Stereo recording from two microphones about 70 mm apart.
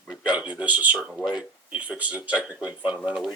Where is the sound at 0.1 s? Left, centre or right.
Centre.